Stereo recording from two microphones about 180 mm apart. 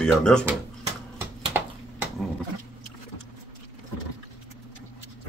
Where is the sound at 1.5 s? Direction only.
10° right (ahead or behind).